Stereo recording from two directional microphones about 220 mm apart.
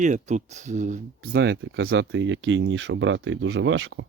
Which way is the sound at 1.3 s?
55° right (ahead or behind).